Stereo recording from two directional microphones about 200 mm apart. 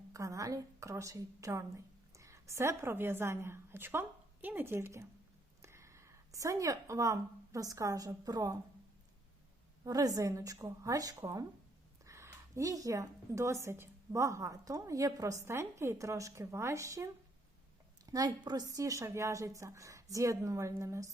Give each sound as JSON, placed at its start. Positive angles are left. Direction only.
{"t": 0.1, "sound": "a woman's voice", "side_deg": -15}
{"t": 9.8, "sound": "a woman's voice", "side_deg": -15}